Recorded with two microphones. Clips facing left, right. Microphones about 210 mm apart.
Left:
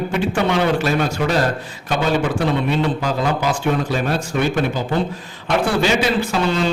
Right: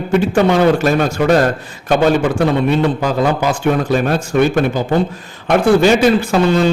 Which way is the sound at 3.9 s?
50° right (ahead or behind).